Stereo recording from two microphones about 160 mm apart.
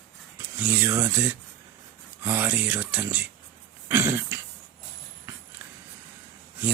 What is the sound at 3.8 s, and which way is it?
Throat clearing, 15° right (ahead or behind).